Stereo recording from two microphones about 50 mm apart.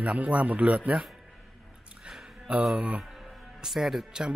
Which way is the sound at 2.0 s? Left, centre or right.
Centre.